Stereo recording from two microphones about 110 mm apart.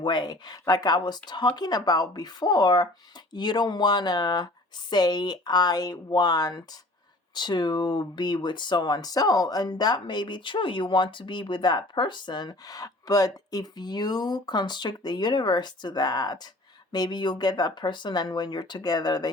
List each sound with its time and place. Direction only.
0.0 s speech: 45° left (ahead or behind)